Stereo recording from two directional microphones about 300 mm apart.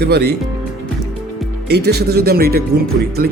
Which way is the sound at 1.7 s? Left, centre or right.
Right.